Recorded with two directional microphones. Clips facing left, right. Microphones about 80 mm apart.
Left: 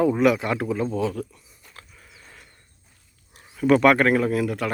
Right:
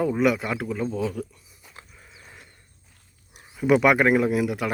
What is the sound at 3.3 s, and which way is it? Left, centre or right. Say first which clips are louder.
Speech: left 1 dB; centre.